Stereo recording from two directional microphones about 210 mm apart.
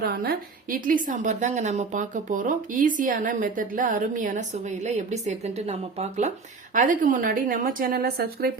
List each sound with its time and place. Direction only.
0.0 s a woman's voice: 45° right (ahead or behind)